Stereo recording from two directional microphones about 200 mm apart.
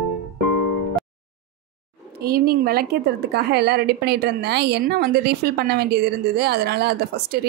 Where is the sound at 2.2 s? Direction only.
50° right (ahead or behind).